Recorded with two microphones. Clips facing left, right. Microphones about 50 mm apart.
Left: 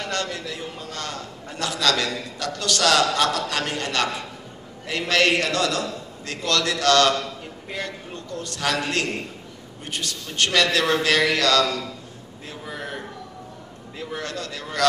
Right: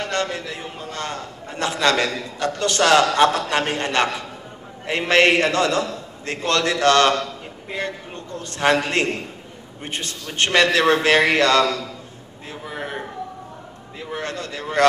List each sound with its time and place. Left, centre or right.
0.0 s a man's voice: right
12.6 s a sound: right
14.1 s a man's voice: right